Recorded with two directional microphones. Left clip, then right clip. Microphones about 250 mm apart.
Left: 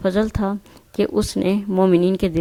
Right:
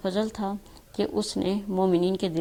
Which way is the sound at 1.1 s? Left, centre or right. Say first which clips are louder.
Left 7 dB; left.